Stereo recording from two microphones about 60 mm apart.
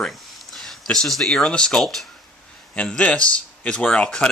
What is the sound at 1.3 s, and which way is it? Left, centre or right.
Speech, centre.